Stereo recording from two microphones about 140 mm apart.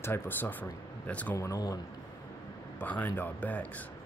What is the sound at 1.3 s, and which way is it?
Speech, 25° left (ahead or behind).